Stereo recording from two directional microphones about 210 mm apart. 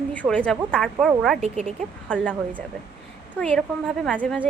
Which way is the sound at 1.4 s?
30° right (ahead or behind).